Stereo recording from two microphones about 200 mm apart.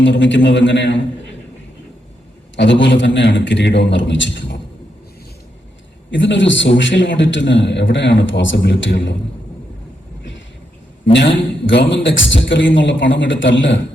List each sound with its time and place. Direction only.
0.0 s a man's voice: 65° left (ahead or behind)
2.6 s a man's voice: 65° left (ahead or behind)
6.1 s a man's voice: 65° left (ahead or behind)
11.6 s a man's voice: 60° left (ahead or behind)